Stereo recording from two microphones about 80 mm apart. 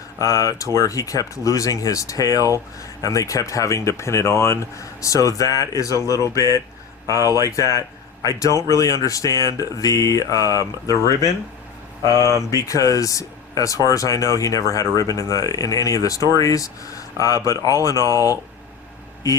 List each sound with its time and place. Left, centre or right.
0.2 s speech: left
12.0 s speech: left